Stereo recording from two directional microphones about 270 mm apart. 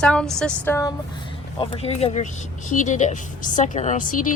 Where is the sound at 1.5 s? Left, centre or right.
Left.